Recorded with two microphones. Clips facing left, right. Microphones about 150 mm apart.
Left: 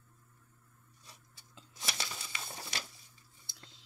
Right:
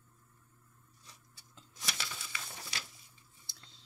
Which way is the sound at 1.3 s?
20° left (ahead or behind).